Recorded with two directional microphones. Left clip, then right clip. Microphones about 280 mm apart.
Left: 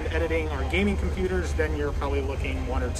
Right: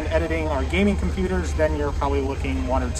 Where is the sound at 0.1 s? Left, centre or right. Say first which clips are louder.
Right 5 dB; centre.